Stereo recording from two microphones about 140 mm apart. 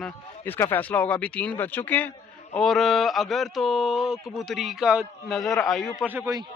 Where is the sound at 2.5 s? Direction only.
Centre (ahead or behind).